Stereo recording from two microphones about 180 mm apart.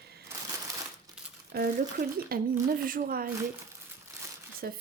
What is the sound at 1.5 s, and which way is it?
A woman's voice, 60° right (ahead or behind).